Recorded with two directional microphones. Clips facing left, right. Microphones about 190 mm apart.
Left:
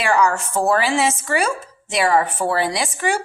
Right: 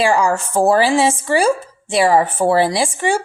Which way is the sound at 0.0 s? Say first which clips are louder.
Right 3 dB; 30° right (ahead or behind).